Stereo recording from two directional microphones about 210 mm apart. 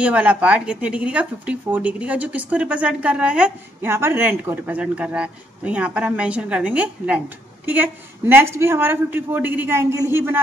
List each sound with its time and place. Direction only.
0.0 s a woman's voice: 5° right (ahead or behind)